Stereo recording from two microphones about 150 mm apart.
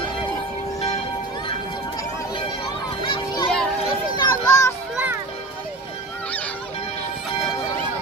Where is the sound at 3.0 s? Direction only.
35° left (ahead or behind).